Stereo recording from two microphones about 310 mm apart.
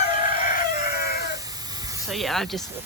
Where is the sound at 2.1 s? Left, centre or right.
Centre.